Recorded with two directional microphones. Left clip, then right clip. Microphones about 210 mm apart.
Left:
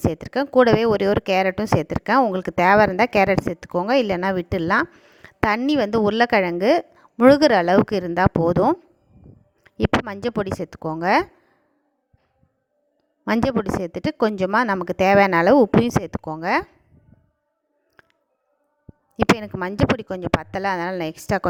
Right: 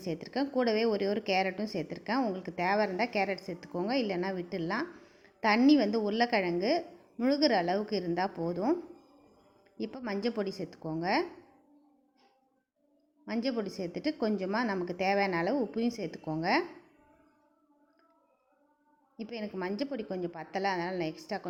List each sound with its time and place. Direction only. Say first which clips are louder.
0.0 s speech: left 11 dB; 50° left (ahead or behind)
13.2 s speech: left 13 dB; 50° left (ahead or behind)
19.1 s speech: left 19 dB; 50° left (ahead or behind)